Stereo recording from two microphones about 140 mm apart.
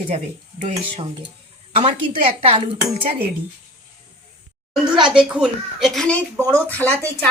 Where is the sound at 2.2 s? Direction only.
40° right (ahead or behind).